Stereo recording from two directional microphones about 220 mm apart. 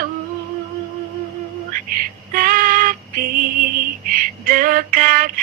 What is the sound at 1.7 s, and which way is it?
Female singing, 40° right (ahead or behind).